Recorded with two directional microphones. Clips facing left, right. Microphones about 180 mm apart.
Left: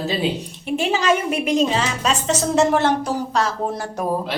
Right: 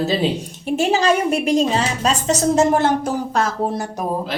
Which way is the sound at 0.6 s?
45° right (ahead or behind).